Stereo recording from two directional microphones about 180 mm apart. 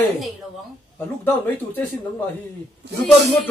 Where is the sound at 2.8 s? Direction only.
70° right (ahead or behind).